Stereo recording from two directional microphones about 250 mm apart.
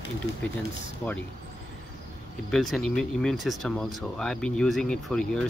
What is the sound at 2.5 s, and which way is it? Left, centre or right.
Speech, centre.